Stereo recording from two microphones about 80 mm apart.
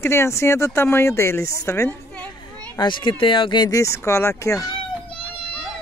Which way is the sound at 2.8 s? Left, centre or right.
Left.